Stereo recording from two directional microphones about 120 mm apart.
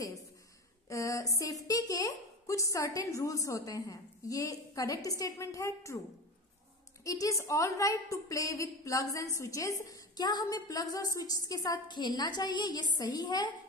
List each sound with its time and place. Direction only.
0.8 s a woman's voice: 25° left (ahead or behind)
7.1 s a woman's voice: 25° left (ahead or behind)